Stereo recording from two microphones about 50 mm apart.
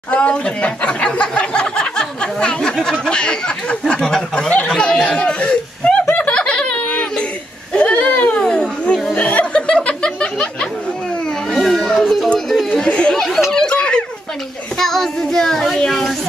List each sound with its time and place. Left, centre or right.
0.1 s speech: left
4.0 s child singing: centre
4.6 s speech: centre
6.1 s snicker: left
7.7 s a sound: left
9.1 s chuckle: left
9.5 s chuckle: left
9.8 s a sound: left
11.5 s children playing: centre
12.4 s chatter: centre
12.8 s speech: centre
13.5 s snicker: centre
14.8 s child singing: centre